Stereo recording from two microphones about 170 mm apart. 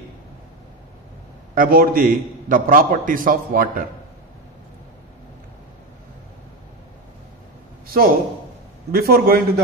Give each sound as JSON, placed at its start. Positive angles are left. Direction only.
{"t": 1.5, "sound": "a man's voice", "side_deg": -55}
{"t": 7.8, "sound": "a sound", "side_deg": -60}
{"t": 8.9, "sound": "a man's voice", "side_deg": -65}